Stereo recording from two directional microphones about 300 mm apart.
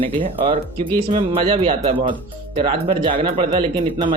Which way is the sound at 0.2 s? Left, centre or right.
Centre.